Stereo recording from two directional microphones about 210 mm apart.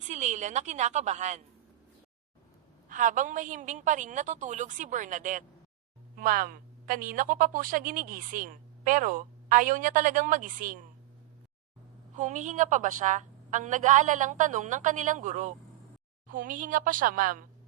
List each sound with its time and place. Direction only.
0.0 s a woman's voice: 35° right (ahead or behind)
2.9 s a woman's voice: 40° right (ahead or behind)
12.1 s a woman's voice: 35° right (ahead or behind)